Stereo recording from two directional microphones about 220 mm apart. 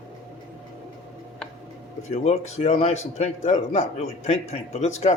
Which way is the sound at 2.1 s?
30° left (ahead or behind).